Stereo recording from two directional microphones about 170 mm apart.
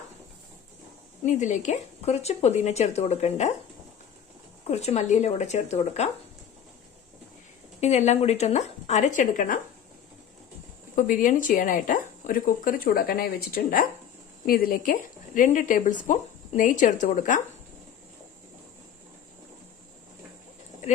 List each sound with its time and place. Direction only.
1.2 s speech: 45° left (ahead or behind)
4.6 s speech: 40° left (ahead or behind)
7.8 s speech: 40° left (ahead or behind)
10.9 s a woman's voice: 50° left (ahead or behind)